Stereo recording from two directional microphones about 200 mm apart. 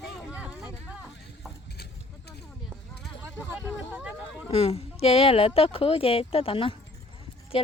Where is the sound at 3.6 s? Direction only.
5° right (ahead or behind).